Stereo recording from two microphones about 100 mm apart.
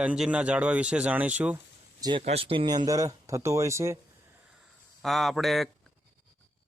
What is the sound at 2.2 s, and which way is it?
Speech, 80° right.